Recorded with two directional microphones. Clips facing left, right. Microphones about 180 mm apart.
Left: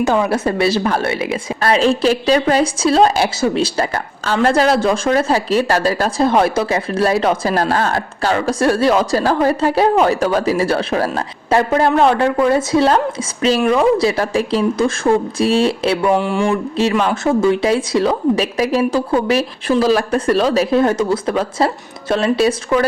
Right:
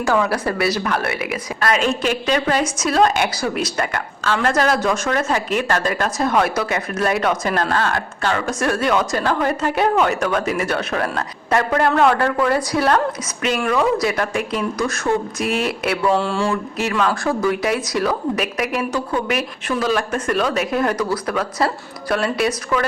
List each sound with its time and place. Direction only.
0.0 s speech: 20° left (ahead or behind)
16.0 s speech: 15° left (ahead or behind)
16.7 s speech: 30° left (ahead or behind)